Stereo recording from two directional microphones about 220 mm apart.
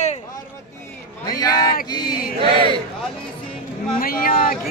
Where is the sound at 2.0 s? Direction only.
40° left (ahead or behind).